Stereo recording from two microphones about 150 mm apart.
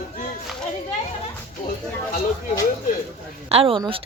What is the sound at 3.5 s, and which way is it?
Speech, 40° right (ahead or behind).